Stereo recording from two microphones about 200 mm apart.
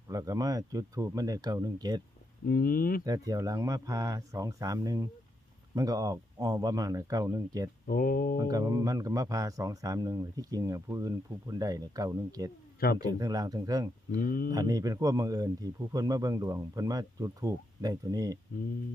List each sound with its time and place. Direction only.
0.1 s a man's voice: 15° right (ahead or behind)
2.5 s speech: 45° left (ahead or behind)
3.0 s a man's voice: 20° right (ahead or behind)
7.9 s speech: 50° left (ahead or behind)
8.4 s a man's voice: 15° right (ahead or behind)
14.2 s speech: 45° left (ahead or behind)
14.5 s a man's voice: 20° right (ahead or behind)